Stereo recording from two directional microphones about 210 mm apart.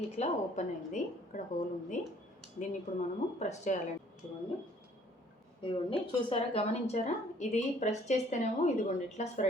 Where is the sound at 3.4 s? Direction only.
35° left (ahead or behind).